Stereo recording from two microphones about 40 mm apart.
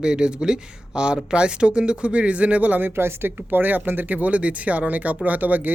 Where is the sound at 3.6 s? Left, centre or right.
Right.